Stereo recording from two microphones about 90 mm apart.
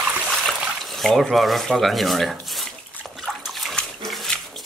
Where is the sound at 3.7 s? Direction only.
5° left (ahead or behind).